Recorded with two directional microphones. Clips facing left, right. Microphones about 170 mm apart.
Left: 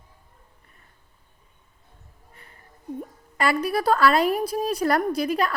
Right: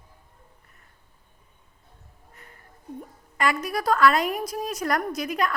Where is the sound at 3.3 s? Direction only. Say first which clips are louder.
Left 3 dB; 35° left (ahead or behind).